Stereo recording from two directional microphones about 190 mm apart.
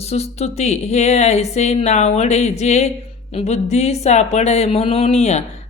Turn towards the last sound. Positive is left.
turn(degrees=35)  # may be behind; listen again after turning